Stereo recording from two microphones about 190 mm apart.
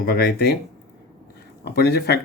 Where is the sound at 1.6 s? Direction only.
60° left (ahead or behind).